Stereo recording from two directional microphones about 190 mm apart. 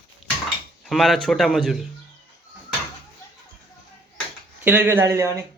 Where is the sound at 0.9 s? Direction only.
Centre (ahead or behind).